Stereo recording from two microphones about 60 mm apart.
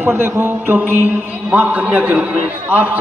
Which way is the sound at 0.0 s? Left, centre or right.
Right.